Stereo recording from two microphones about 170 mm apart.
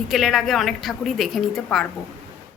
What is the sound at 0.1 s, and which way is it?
A woman's voice, centre (ahead or behind).